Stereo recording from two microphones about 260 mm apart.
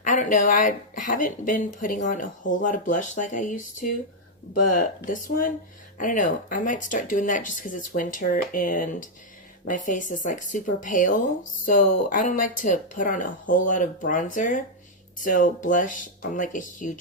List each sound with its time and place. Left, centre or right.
0.0 s speech: left